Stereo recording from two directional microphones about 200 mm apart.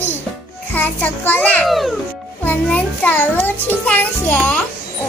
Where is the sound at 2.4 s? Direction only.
10° left (ahead or behind).